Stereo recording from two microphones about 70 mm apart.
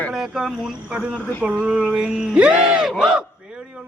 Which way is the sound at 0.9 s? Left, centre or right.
Centre.